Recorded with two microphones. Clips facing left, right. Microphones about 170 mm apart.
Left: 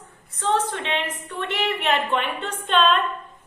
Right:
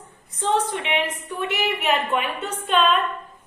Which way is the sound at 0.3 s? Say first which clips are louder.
Right 1 dB; 15° right (ahead or behind).